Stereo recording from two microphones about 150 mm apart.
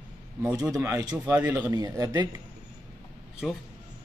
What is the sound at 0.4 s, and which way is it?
Speech, 20° right (ahead or behind).